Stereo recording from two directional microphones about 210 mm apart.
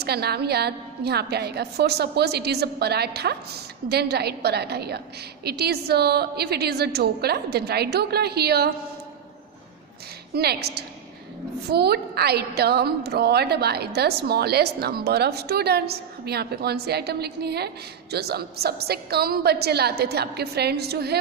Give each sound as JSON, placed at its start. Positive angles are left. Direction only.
{"t": 0.0, "sound": "a woman's voice", "side_deg": -50}
{"t": 10.3, "sound": "a woman's voice", "side_deg": -50}